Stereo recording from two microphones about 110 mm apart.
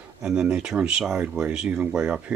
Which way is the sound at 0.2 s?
5° right (ahead or behind).